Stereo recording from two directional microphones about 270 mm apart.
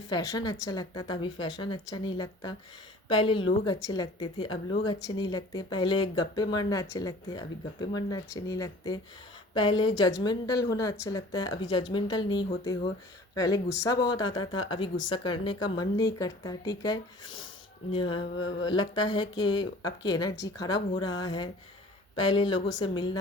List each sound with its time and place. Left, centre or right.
0.1 s speech: centre
3.1 s music: centre
3.6 s speech: centre
17.9 s music: centre
18.6 s speech: centre